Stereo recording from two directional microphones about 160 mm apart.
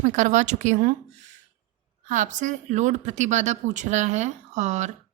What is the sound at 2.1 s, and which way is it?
A woman's voice, 50° right (ahead or behind).